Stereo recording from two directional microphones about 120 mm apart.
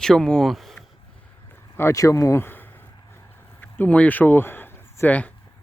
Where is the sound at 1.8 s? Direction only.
25° left (ahead or behind).